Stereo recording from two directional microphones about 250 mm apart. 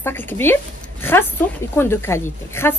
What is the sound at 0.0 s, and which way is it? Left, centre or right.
Speech, centre.